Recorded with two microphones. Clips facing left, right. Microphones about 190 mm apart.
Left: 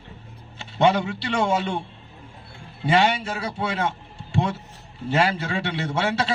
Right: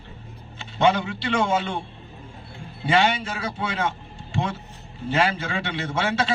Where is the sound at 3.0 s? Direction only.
40° left (ahead or behind).